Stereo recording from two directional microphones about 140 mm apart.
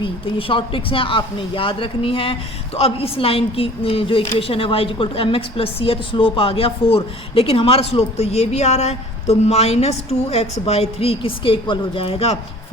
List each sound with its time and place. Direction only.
0.0 s a woman's voice: 40° left (ahead or behind)